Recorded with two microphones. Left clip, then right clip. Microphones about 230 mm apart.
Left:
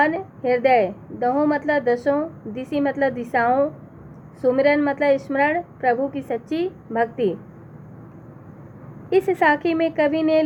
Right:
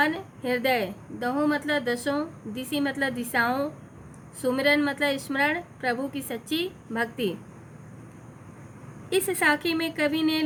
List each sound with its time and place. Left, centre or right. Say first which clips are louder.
0.5 s a woman's voice: left 8 dB; right
9.0 s a woman's voice: left 6 dB; right